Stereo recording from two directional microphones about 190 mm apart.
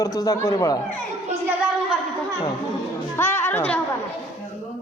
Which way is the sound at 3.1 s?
10° left (ahead or behind).